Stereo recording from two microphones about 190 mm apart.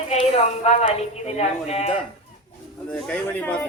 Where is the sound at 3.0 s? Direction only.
10° left (ahead or behind).